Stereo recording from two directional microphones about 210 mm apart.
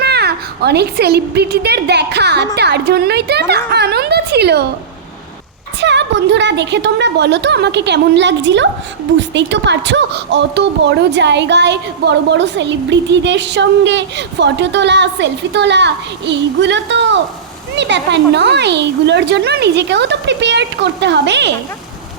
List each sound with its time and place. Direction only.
0.0 s a woman's voice: 50° right (ahead or behind)
5.8 s a woman's voice: 55° right (ahead or behind)